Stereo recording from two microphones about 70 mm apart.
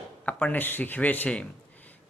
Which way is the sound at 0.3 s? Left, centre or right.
Centre.